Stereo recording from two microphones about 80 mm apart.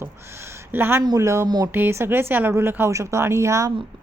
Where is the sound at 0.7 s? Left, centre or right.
Right.